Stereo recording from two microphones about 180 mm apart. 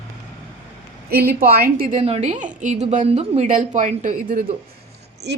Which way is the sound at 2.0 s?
35° right (ahead or behind).